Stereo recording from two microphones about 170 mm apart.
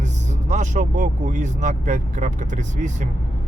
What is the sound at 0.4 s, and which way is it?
Speech, 45° right (ahead or behind).